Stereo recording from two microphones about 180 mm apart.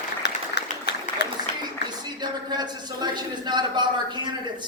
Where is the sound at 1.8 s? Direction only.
25° right (ahead or behind).